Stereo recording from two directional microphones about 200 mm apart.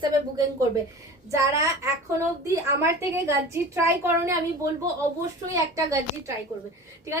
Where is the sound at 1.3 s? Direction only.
15° right (ahead or behind).